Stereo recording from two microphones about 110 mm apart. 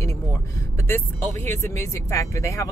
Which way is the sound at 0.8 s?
20° left (ahead or behind).